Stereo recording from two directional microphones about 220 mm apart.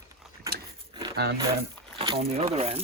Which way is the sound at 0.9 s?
20° right (ahead or behind).